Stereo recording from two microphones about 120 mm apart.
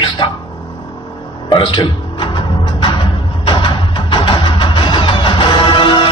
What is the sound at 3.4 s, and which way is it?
Music, 45° left (ahead or behind).